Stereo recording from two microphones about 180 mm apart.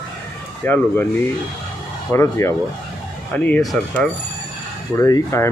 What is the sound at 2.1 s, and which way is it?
Speech, 15° left (ahead or behind).